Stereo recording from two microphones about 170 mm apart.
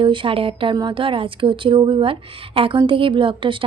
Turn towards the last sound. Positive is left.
turn(degrees=-30)  # may be behind; listen again after turning